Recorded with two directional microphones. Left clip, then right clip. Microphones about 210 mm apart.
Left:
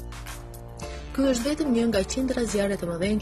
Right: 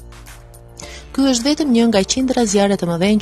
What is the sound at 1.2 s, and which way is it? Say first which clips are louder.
Speech: right 8 dB; 45° right (ahead or behind).